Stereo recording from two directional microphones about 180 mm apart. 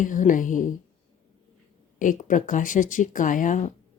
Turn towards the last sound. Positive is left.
turn(degrees=45)  # may be behind; listen again after turning